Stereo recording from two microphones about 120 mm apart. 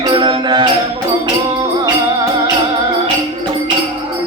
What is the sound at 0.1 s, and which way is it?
Music, 40° right (ahead or behind).